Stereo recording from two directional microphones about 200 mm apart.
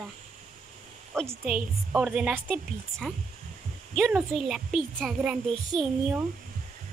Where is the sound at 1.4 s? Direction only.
5° right (ahead or behind).